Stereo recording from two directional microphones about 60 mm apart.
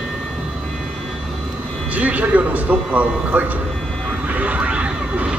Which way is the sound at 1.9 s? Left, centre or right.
Right.